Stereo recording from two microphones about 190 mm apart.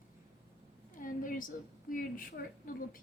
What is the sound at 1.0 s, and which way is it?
A woman's voice, 45° left (ahead or behind).